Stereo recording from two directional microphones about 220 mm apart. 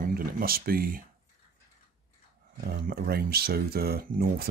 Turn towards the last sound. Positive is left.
turn(degrees=-45)  # may be behind; listen again after turning